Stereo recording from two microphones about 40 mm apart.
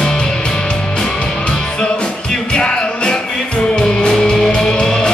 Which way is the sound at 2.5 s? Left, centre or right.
Left.